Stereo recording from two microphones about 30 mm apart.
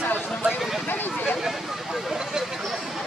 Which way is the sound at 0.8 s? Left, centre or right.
Left.